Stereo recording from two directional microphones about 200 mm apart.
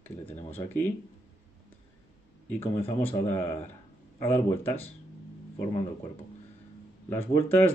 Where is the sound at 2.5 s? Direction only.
10° left (ahead or behind).